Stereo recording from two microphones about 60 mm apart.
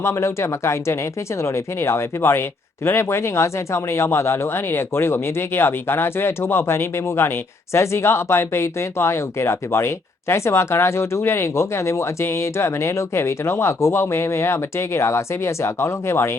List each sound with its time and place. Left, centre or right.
0.0 s speech: left